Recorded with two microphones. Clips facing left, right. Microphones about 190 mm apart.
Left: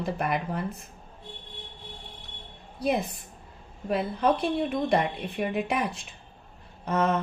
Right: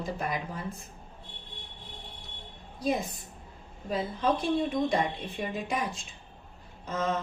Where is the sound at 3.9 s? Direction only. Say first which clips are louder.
Left 3 dB; 60° left (ahead or behind).